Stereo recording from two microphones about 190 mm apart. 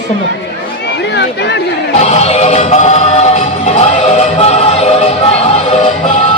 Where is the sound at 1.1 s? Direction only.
65° left (ahead or behind).